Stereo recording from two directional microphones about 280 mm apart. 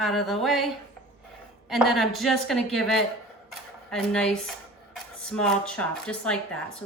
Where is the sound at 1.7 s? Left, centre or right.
Centre.